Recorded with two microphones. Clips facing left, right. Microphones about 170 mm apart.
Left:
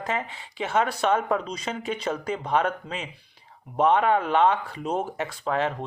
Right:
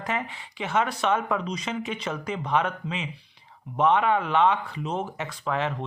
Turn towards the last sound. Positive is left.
turn(degrees=30)  # may be behind; listen again after turning